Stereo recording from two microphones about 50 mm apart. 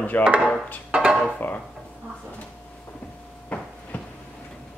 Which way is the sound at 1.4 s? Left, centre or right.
Left.